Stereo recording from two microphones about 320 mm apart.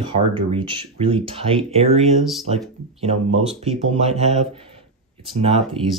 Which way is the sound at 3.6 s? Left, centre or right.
Centre.